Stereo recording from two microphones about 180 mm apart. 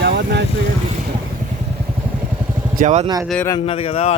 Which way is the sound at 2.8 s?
40° right (ahead or behind).